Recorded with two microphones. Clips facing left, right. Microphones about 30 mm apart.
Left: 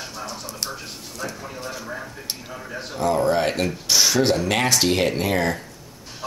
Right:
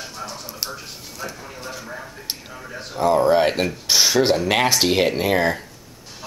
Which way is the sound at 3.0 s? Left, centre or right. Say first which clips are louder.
Right 4 dB; centre.